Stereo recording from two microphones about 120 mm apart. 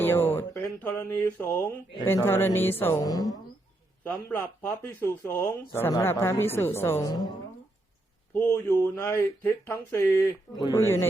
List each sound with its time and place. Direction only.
0.0 s a sound: 15° left (ahead or behind)
0.8 s speech: 15° left (ahead or behind)
3.0 s a woman's voice: 30° left (ahead or behind)
4.0 s speech: 15° left (ahead or behind)
7.0 s a woman's voice: 35° left (ahead or behind)
8.3 s speech: 15° left (ahead or behind)